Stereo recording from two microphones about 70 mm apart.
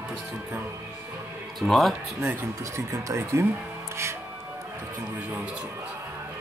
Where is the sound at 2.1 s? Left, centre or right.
Right.